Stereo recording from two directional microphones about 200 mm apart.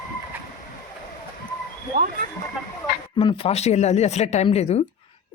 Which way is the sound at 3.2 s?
30° left (ahead or behind).